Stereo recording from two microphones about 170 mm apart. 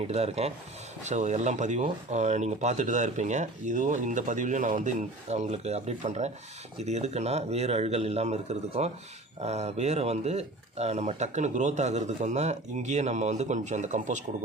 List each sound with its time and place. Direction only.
0.1 s a man's voice: 40° right (ahead or behind)